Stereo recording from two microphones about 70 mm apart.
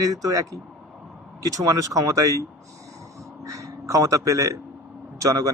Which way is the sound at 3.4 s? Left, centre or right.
Right.